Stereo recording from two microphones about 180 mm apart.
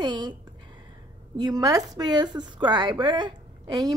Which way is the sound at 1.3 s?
20° right (ahead or behind).